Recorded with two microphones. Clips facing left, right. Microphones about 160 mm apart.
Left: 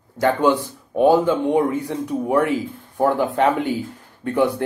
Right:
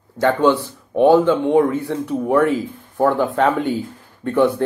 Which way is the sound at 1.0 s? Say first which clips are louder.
Right 3 dB; 10° left (ahead or behind).